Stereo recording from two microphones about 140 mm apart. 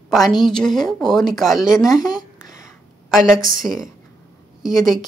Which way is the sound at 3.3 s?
80° right.